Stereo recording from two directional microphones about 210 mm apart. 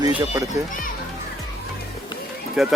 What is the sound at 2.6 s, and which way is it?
Speech, centre (ahead or behind).